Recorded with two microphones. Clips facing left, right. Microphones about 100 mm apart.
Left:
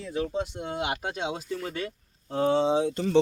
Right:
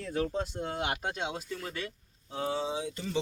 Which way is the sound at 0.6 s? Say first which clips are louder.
Left 2 dB; 20° left (ahead or behind).